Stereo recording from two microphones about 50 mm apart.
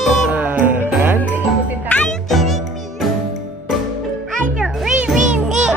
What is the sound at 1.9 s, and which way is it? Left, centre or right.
Music, left.